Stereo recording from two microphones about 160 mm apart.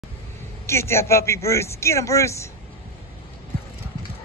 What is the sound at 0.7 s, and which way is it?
A man's voice, 15° left (ahead or behind).